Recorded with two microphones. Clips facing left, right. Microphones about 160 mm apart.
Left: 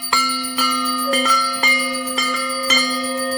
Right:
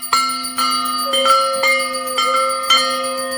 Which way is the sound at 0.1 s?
20° left (ahead or behind).